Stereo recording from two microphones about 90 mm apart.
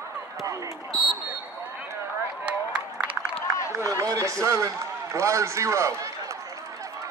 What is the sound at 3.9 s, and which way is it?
Speech, 40° right (ahead or behind).